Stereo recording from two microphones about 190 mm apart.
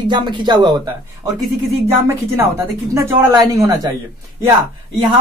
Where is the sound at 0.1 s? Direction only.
25° right (ahead or behind).